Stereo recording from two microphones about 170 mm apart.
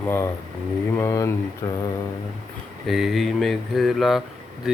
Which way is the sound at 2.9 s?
Centre (ahead or behind).